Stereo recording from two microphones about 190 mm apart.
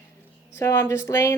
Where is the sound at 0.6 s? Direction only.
15° left (ahead or behind).